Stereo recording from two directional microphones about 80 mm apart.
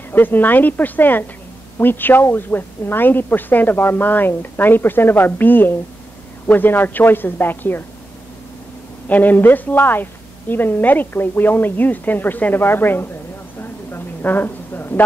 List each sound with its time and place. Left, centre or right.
0.1 s a woman's voice: left
9.0 s a woman's voice: left
13.6 s a sound: left